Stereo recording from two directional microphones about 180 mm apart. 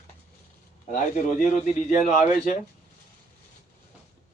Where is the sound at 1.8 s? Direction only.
40° left (ahead or behind).